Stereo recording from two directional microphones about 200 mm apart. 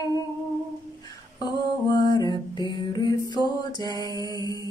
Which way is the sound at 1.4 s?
20° left (ahead or behind).